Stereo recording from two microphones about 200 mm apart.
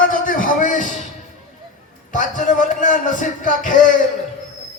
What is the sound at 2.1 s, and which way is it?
A man's voice, 40° left (ahead or behind).